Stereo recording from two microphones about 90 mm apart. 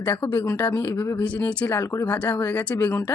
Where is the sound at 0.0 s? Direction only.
20° left (ahead or behind).